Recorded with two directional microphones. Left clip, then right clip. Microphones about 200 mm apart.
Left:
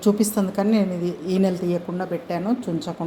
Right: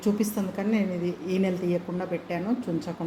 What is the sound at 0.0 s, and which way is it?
A woman's voice, 25° left (ahead or behind).